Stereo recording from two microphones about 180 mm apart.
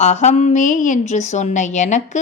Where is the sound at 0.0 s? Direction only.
40° left (ahead or behind).